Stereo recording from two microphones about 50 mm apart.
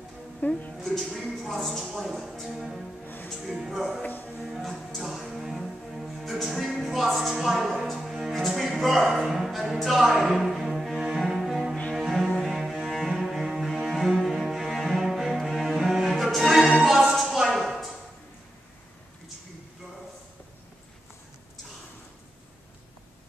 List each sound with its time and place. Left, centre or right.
0.4 s speech: left
0.7 s a sound: centre
1.3 s speech: centre
4.0 s speech: left
4.4 s music: centre
11.9 s cello: centre